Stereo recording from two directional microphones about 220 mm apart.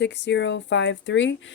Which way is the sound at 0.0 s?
55° left (ahead or behind).